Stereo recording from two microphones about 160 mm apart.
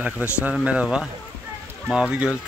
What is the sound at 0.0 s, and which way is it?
A man's voice, 10° right (ahead or behind).